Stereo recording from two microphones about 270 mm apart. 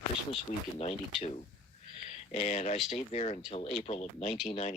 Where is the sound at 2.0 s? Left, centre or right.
Left.